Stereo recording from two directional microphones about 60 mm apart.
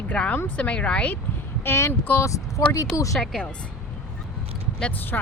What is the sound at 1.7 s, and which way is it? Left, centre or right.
Speech, left.